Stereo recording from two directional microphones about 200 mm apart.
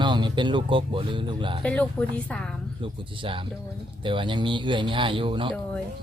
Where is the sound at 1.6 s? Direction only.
5° left (ahead or behind).